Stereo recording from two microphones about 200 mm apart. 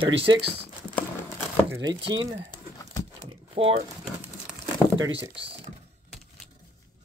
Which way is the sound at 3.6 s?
30° right (ahead or behind).